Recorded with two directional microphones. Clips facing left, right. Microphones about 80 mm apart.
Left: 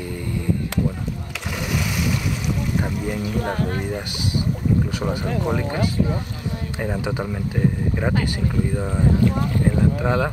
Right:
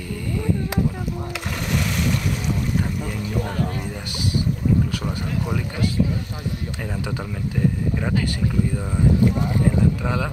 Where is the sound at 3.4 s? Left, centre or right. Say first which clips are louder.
Left 3 dB; left.